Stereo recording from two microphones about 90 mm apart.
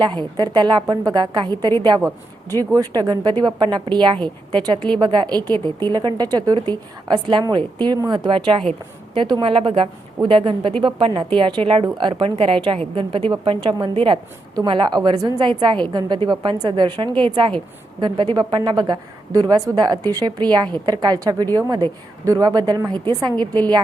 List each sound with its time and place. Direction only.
0.0 s a woman's voice: 55° right (ahead or behind)
2.7 s a woman's voice: 45° right (ahead or behind); by 8.7 s 70° right (ahead or behind)
9.1 s a woman's voice: 60° right (ahead or behind); by 14.2 s 80° right
14.5 s a woman's voice: 55° right (ahead or behind)
21.7 s a woman's voice: 55° right (ahead or behind)
22.2 s a woman's voice: 40° right (ahead or behind)